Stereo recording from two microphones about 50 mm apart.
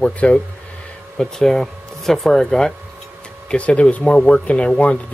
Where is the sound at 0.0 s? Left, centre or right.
Left.